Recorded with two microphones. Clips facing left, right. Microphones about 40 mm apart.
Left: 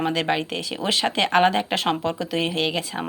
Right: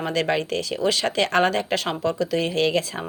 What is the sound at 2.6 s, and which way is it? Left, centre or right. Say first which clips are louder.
Speech: right 3 dB; centre.